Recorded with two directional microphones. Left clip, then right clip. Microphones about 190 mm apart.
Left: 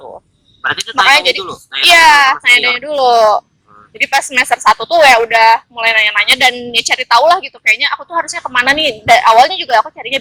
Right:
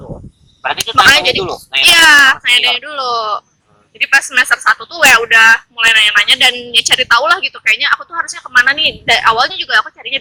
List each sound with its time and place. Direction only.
0.6 s speech: 5° right (ahead or behind)
1.1 s speech: 25° left (ahead or behind)